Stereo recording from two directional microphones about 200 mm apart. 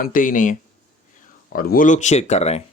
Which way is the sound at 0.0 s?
40° left (ahead or behind).